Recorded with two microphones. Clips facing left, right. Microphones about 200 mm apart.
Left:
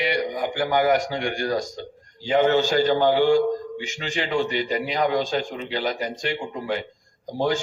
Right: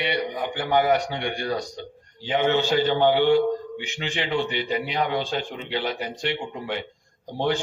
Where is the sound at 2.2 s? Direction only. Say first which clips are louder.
Left 3 dB; 40° left (ahead or behind).